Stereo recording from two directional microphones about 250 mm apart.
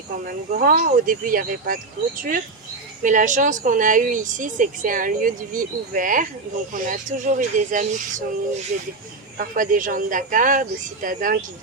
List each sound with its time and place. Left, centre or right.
0.3 s a woman's voice: right
9.4 s a woman's voice: right